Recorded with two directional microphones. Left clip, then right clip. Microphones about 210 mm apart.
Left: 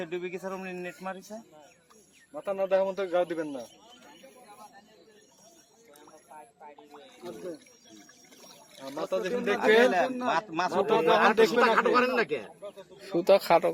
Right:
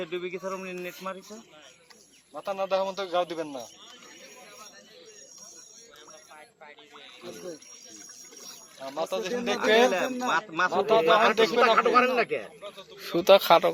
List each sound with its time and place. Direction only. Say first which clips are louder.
0.0 s a man's voice: right 2 dB; 50° left (ahead or behind)
2.3 s a man's voice: left 1 dB; 40° left (ahead or behind)
8.8 s a man's voice: right 1 dB; 45° left (ahead or behind)
13.0 s a man's voice: right 4 dB; centre (ahead or behind)